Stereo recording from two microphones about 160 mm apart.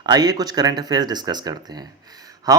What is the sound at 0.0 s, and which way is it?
Speech, 25° right (ahead or behind).